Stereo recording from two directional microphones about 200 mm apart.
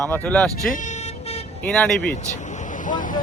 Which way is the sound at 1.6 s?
5° left (ahead or behind).